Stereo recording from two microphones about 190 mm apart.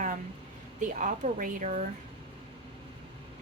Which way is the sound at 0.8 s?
40° right (ahead or behind).